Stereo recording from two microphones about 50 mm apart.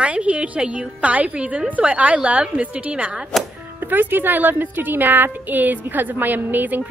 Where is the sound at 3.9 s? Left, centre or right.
Right.